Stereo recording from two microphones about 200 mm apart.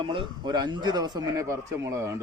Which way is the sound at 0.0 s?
25° right (ahead or behind).